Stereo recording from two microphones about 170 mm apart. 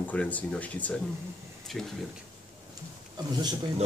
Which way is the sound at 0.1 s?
10° left (ahead or behind).